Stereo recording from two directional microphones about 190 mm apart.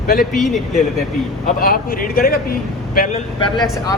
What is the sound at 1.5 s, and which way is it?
Speech, 50° left (ahead or behind).